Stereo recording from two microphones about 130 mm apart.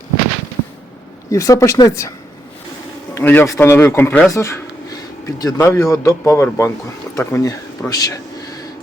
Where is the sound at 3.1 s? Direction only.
15° left (ahead or behind).